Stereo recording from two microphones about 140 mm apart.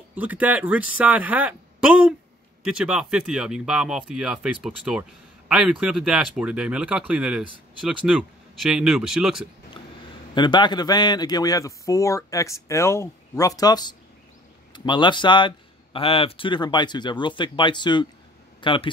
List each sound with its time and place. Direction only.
0.1 s speech: 10° right (ahead or behind)
9.8 s a sound: 35° left (ahead or behind)
10.3 s a man's voice: 35° left (ahead or behind)